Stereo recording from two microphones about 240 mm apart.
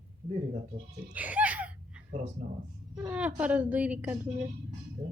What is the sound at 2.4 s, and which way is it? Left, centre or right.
Speech, right.